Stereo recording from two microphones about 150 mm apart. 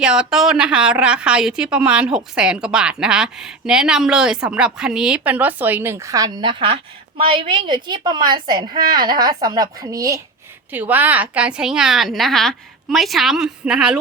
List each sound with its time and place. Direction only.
0.0 s a woman's voice: 5° right (ahead or behind); by 10.2 s 20° right (ahead or behind)
10.7 s a woman's voice: 10° right (ahead or behind)